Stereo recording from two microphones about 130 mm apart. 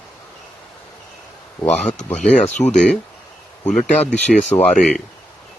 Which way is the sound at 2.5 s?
65° left (ahead or behind).